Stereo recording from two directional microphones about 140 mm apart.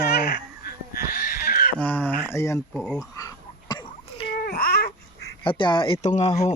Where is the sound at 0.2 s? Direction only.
90° left.